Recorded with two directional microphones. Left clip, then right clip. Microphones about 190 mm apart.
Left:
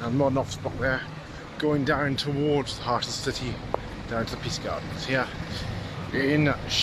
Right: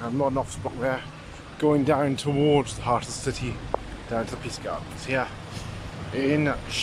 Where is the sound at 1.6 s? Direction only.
10° right (ahead or behind).